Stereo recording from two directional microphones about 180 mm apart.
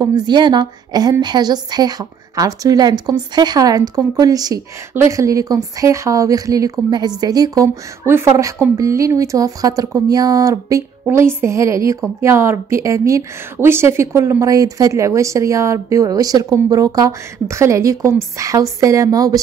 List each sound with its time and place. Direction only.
0.0 s a woman's voice: 25° right (ahead or behind)